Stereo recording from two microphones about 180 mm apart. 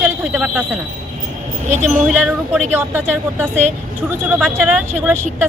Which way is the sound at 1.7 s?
40° right (ahead or behind).